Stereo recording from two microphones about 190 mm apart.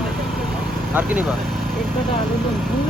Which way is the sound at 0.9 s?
10° right (ahead or behind).